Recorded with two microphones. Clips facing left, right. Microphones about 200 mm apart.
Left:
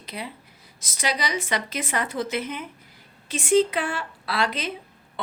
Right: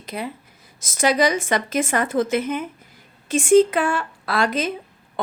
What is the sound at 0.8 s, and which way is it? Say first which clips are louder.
A woman's voice: right 9 dB; 50° right (ahead or behind).